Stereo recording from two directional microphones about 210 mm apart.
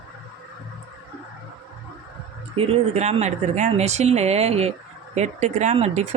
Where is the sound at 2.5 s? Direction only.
30° right (ahead or behind).